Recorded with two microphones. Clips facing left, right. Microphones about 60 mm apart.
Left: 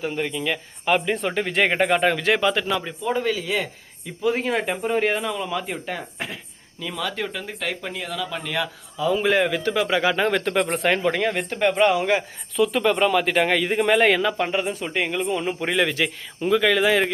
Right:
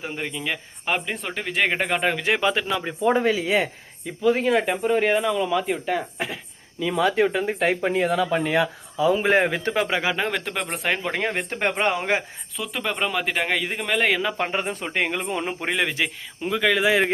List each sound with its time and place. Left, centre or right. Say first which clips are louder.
0.0 s speech: left 4 dB; centre
2.2 s speech: left 1 dB; centre
3.0 s speech: right 8 dB; right
4.2 s speech: right 3 dB; centre
6.7 s speech: right 7 dB; centre
7.0 s speech: right 8 dB; right
9.1 s speech: even; right
10.0 s speech: left 4 dB; centre
11.2 s speech: left 3 dB; right
12.5 s speech: left 8 dB; centre
14.5 s speech: left 1 dB; right
15.6 s speech: left 3 dB; centre